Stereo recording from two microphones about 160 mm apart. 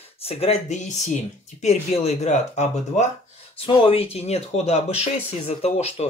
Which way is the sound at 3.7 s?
35° left (ahead or behind).